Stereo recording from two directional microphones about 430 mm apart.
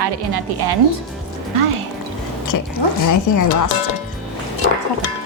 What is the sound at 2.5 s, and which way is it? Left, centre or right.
Speech, left.